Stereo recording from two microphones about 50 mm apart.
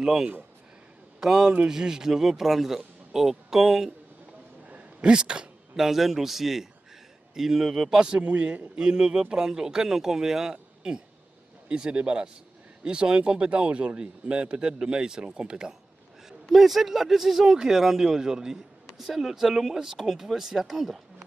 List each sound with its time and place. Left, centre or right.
0.0 s speech: centre
4.6 s a sound: right
5.1 s speech: centre
5.8 s speech: centre
8.1 s speech: right
16.4 s speech: centre